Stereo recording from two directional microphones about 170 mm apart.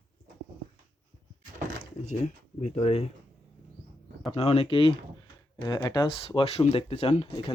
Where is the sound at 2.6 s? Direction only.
40° left (ahead or behind).